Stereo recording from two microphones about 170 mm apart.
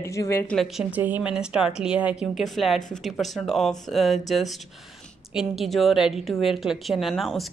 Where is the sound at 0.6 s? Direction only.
5° right (ahead or behind).